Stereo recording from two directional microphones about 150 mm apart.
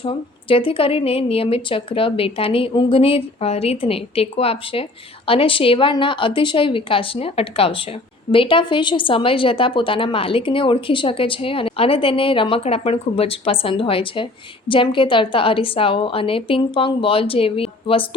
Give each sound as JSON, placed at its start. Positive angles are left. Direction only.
{"t": 0.0, "sound": "a woman's voice", "side_deg": 35}